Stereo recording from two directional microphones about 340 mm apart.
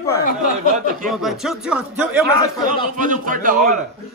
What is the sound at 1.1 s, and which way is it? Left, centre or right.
Speech, centre.